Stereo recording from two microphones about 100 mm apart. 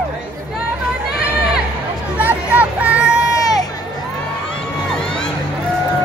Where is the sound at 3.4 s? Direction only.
35° left (ahead or behind).